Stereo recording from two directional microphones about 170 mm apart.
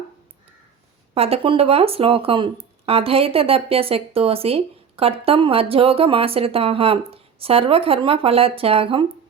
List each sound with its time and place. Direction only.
1.1 s speech: 35° right (ahead or behind)